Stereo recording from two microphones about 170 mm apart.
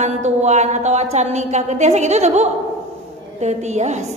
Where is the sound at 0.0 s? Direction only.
45° right (ahead or behind).